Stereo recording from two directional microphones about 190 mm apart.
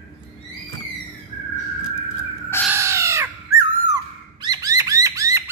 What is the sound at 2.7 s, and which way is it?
Bird, 15° right (ahead or behind).